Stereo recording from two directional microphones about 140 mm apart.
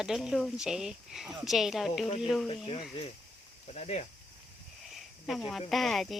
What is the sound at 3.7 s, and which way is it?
Speech, 50° left (ahead or behind).